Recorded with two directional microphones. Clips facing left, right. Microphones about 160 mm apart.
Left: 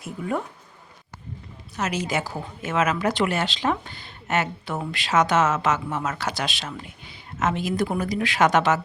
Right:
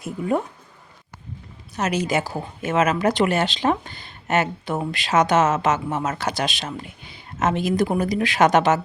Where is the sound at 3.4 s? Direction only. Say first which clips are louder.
Right 3 dB; 20° right (ahead or behind).